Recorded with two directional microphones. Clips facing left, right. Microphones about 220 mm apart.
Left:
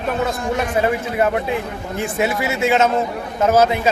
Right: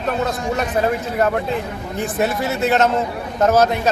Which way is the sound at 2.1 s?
10° left (ahead or behind).